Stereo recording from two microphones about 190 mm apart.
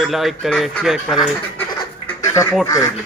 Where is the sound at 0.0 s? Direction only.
Centre (ahead or behind).